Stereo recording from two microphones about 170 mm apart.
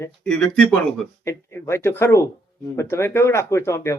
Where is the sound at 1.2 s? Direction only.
15° left (ahead or behind).